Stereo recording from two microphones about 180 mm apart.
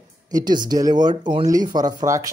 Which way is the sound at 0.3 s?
20° right (ahead or behind).